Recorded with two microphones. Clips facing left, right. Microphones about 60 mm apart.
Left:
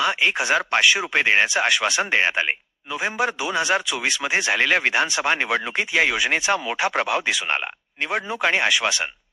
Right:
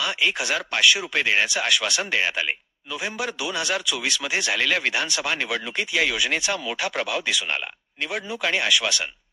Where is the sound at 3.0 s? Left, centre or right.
Left.